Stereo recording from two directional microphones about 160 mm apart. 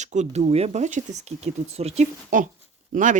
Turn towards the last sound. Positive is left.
turn(degrees=-50)  # may be behind; listen again after turning